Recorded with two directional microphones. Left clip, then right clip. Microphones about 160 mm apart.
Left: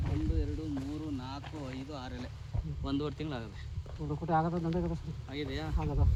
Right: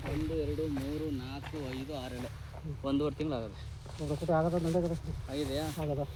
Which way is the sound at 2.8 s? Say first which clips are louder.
Right 4 dB; 30° left (ahead or behind).